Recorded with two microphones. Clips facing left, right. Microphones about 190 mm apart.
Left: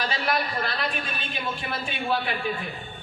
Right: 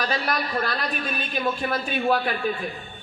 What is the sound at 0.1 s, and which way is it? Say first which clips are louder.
A man's voice: right 1 dB; 45° right (ahead or behind).